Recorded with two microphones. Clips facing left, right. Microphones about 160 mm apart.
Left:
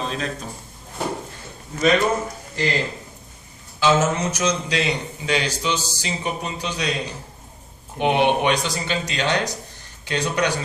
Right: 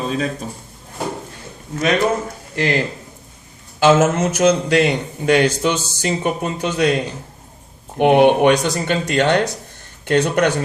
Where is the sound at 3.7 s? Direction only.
50° right (ahead or behind).